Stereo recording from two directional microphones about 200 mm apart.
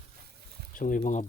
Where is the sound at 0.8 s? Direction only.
40° left (ahead or behind).